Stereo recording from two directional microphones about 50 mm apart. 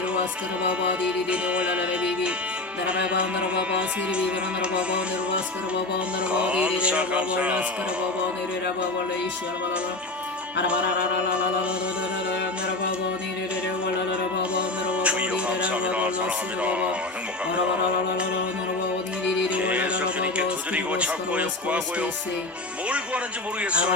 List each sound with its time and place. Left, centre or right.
1.3 s music: right
6.3 s music: right
14.5 s music: right
19.5 s music: right